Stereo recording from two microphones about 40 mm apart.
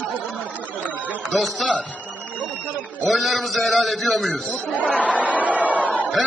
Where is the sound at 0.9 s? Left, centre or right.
Right.